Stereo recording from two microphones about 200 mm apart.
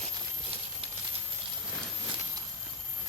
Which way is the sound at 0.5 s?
30° right (ahead or behind).